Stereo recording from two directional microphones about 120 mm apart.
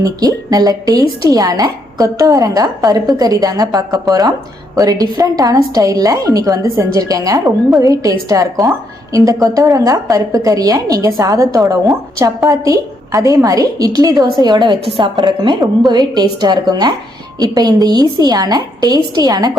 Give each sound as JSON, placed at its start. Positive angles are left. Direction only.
{"t": 0.0, "sound": "a woman's voice", "side_deg": -30}